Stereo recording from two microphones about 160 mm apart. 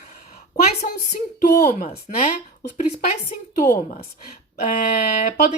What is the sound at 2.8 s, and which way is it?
A woman's voice, 60° left (ahead or behind).